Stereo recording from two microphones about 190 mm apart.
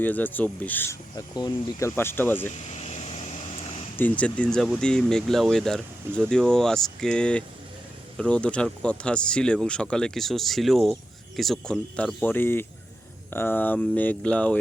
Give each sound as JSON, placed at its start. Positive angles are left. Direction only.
{"t": 0.0, "sound": "speech", "side_deg": 10}
{"t": 2.5, "sound": "vehicle", "side_deg": 35}
{"t": 3.9, "sound": "speech", "side_deg": 10}